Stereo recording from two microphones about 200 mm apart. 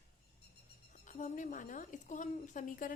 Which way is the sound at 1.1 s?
40° left (ahead or behind).